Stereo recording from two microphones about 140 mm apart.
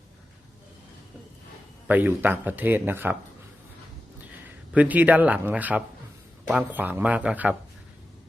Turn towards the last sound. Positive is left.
turn(degrees=-10)  # may be behind; listen again after turning